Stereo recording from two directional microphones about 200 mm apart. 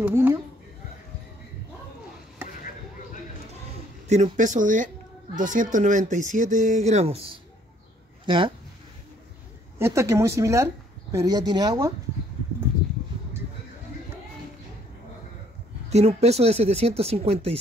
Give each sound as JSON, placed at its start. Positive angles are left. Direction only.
{"t": 0.0, "sound": "speech", "side_deg": -10}
{"t": 4.1, "sound": "a woman's voice", "side_deg": -35}
{"t": 8.3, "sound": "speech", "side_deg": -25}
{"t": 9.8, "sound": "speech", "side_deg": -15}
{"t": 15.9, "sound": "a woman's voice", "side_deg": -30}